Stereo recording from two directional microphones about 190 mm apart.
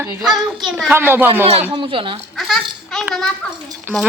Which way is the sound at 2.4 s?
Centre (ahead or behind).